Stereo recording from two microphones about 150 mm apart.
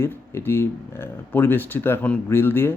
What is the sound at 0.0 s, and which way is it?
Speech, 15° left (ahead or behind).